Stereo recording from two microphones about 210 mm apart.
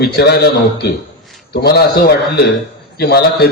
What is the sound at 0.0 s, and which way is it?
Speech, 50° left (ahead or behind).